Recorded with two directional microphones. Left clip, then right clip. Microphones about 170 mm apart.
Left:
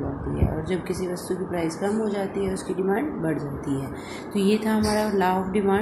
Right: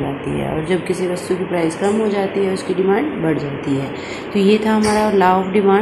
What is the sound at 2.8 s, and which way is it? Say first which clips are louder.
Speech: right 8 dB; 10° left (ahead or behind).